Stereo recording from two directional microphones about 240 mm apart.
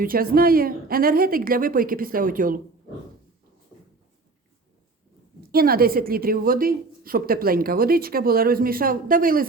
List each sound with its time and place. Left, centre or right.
0.0 s a woman's voice: right
5.5 s a woman's voice: right